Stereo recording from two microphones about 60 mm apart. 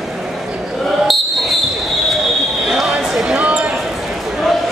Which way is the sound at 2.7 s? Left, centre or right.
Centre.